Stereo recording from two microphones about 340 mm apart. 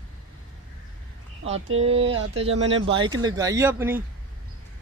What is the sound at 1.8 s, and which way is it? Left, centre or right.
Speech, centre.